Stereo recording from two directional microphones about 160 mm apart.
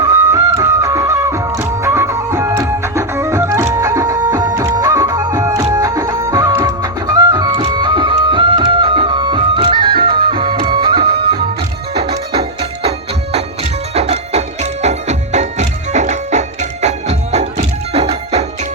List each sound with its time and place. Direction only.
0.0 s music: 25° right (ahead or behind); by 12.9 s 40° right (ahead or behind)
13.9 s music: 40° right (ahead or behind)